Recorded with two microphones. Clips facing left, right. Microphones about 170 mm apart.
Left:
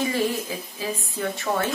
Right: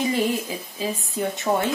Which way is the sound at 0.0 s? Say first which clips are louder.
Right 2 dB; 20° right (ahead or behind).